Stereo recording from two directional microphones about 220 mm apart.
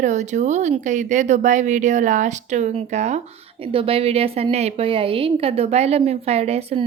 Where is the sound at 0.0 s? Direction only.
30° right (ahead or behind).